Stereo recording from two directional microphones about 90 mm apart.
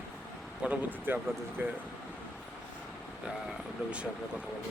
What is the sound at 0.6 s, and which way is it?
Speech, 15° right (ahead or behind).